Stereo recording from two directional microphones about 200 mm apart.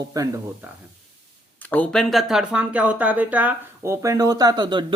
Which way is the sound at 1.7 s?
5° left (ahead or behind).